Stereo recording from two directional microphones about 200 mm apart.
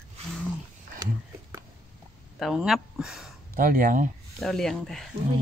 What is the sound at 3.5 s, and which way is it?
Speech, 45° right (ahead or behind).